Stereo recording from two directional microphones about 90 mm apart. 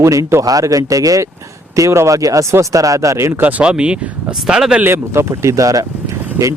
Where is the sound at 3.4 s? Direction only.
15° right (ahead or behind).